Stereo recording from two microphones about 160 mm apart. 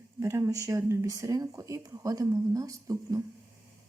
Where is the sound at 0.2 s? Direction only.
20° right (ahead or behind).